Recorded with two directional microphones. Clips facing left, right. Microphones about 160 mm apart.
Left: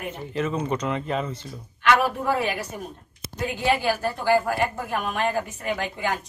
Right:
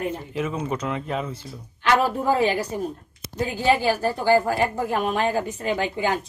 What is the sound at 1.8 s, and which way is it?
Speech, 35° right (ahead or behind).